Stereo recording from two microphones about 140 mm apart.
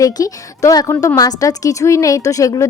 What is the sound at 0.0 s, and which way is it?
A woman's voice, 25° left (ahead or behind).